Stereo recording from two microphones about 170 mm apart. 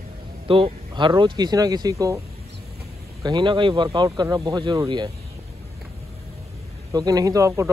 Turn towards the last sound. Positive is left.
turn(degrees=-20)  # may be behind; listen again after turning